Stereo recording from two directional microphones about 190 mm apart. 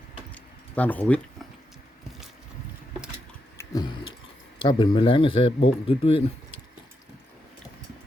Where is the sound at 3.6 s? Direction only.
20° left (ahead or behind).